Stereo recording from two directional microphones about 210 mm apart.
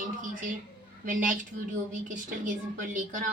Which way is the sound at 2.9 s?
40° right (ahead or behind).